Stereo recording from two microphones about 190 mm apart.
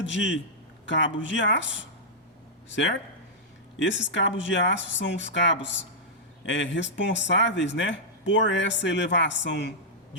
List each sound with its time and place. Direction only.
0.0 s speech: 75° left (ahead or behind)
2.6 s speech: 70° left (ahead or behind)